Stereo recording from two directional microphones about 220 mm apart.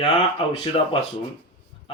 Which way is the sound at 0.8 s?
35° left (ahead or behind).